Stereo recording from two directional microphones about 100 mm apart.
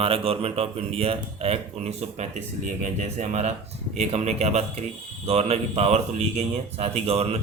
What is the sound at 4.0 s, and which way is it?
Speech, 90° right.